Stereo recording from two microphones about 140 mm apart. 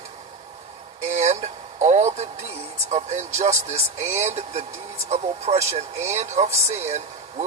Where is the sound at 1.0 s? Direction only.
50° right (ahead or behind).